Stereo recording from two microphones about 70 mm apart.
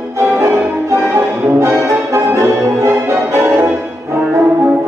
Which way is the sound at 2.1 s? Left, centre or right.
Right.